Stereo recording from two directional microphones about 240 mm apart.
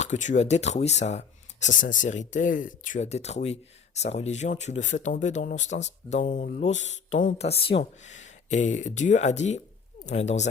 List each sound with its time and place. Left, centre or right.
0.0 s speech: left